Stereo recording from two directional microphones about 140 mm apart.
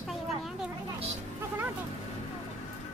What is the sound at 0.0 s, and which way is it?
Children playing, centre (ahead or behind).